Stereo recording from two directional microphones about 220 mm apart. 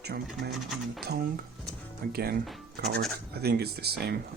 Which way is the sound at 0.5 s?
Centre (ahead or behind).